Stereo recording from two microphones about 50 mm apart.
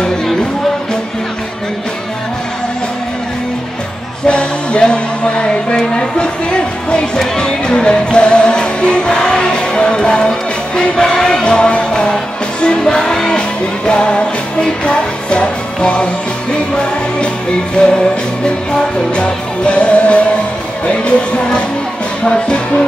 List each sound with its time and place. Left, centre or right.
4.3 s music: centre
17.7 s music: centre